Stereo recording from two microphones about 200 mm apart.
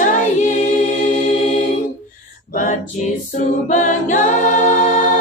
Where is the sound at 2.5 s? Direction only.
40° left (ahead or behind).